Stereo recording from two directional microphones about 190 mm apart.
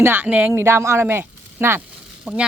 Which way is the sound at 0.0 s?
10° right (ahead or behind).